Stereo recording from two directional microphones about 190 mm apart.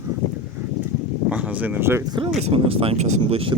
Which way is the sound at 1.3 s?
5° right (ahead or behind).